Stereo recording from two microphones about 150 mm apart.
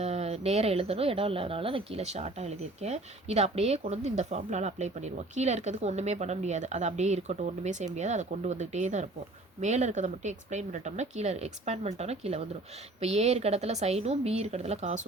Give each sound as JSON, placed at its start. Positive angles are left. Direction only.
{"t": 0.0, "sound": "speech", "side_deg": -45}